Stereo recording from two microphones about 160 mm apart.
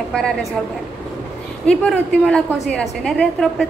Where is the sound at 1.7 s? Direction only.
5° left (ahead or behind).